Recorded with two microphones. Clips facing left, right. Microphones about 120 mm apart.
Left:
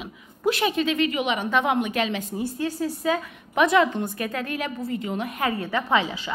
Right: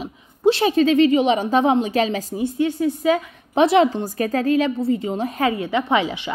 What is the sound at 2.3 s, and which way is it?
A woman's voice, 20° right (ahead or behind).